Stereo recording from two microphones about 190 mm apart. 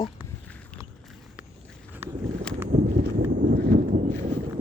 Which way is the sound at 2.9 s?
50° right (ahead or behind).